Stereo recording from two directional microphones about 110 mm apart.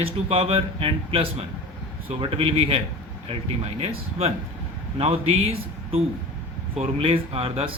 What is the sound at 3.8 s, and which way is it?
Speech, 65° right (ahead or behind).